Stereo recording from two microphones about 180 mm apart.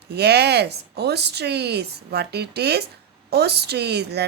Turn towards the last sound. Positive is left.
turn(degrees=-65)  # may be behind; listen again after turning